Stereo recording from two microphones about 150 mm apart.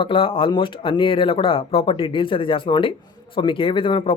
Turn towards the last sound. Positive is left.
turn(degrees=35)  # may be behind; listen again after turning